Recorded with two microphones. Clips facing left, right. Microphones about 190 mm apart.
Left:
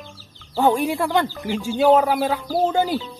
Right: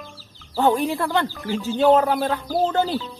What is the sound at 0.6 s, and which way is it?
Speech, 10° left (ahead or behind).